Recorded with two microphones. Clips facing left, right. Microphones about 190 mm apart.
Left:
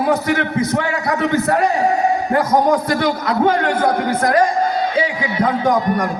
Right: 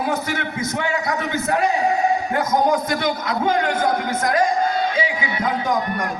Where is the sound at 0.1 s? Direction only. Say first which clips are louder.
Left 7 dB; 35° left (ahead or behind).